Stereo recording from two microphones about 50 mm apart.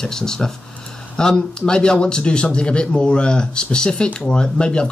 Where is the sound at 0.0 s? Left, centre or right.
Centre.